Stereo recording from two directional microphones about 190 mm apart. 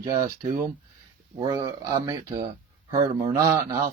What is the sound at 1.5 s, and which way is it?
Speech, 20° right (ahead or behind).